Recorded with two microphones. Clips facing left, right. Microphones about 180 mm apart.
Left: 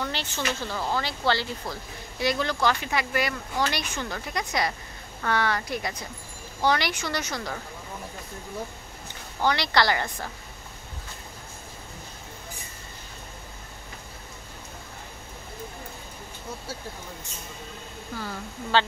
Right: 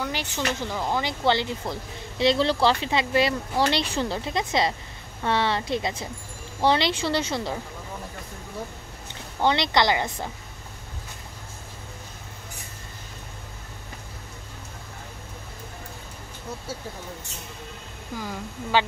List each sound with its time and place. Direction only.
0.0 s speech: 10° right (ahead or behind)
9.4 s speech: 25° right (ahead or behind)
18.1 s a woman's voice: 10° right (ahead or behind)